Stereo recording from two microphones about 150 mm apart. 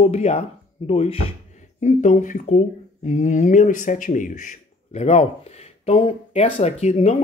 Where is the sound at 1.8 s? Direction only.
55° left (ahead or behind).